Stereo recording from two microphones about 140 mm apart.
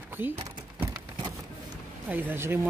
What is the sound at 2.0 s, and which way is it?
Speech, 15° right (ahead or behind).